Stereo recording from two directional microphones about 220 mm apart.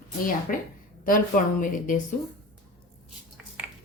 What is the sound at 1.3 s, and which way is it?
Speech, 40° left (ahead or behind).